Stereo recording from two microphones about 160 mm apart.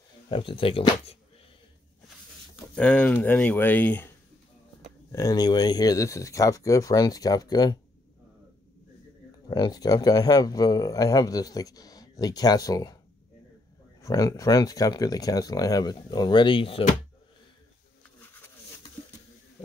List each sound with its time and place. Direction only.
0.3 s speech: 35° left (ahead or behind)
2.7 s speech: 10° left (ahead or behind)
5.1 s speech: 20° left (ahead or behind)
9.5 s speech: 25° left (ahead or behind)
14.0 s speech: 20° left (ahead or behind)